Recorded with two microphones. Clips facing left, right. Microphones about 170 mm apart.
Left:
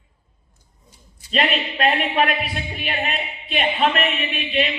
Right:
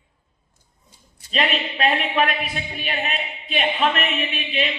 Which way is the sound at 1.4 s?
45° left (ahead or behind).